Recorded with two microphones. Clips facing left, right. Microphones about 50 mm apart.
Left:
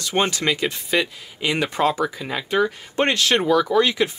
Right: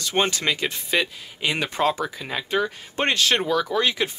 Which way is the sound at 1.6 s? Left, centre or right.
Centre.